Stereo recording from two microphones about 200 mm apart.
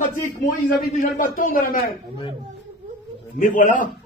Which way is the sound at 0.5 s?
45° left (ahead or behind).